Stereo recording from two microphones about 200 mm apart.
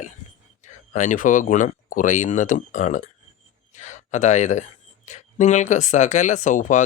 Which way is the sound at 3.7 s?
35° left (ahead or behind).